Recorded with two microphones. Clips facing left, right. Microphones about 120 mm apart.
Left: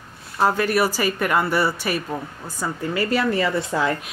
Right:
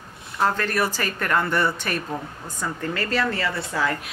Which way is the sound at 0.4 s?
10° left (ahead or behind).